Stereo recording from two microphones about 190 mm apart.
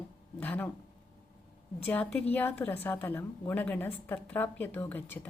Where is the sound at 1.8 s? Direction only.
5° left (ahead or behind).